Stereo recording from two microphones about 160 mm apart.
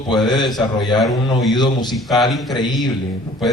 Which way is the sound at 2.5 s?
25° left (ahead or behind).